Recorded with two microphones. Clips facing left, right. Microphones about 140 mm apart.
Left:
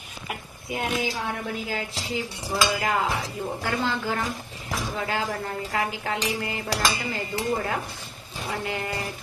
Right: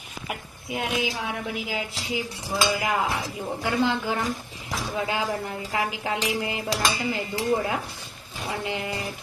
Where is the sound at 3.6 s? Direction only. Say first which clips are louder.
Right 4 dB; 15° right (ahead or behind).